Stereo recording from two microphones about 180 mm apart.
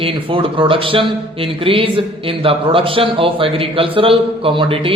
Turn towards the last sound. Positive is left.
turn(degrees=-30)  # may be behind; listen again after turning